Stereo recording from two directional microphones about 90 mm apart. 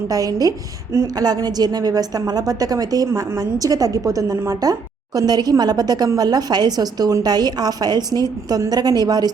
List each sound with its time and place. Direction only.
0.1 s speech: 45° right (ahead or behind)